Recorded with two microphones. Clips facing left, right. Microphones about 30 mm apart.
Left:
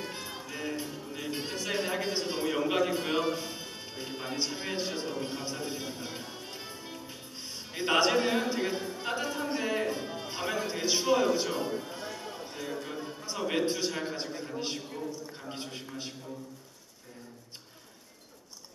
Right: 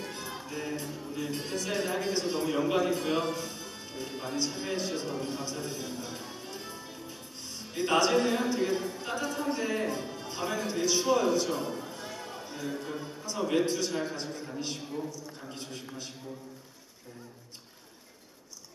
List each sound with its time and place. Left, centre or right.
0.0 s music: centre
2.0 s a man's voice: centre
6.2 s music: centre
13.5 s a man's voice: left